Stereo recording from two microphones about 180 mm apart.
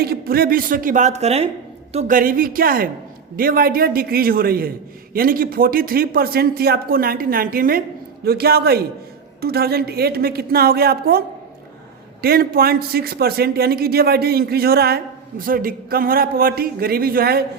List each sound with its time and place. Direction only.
0.0 s a woman's voice: 55° right (ahead or behind)
12.2 s speech: 55° right (ahead or behind)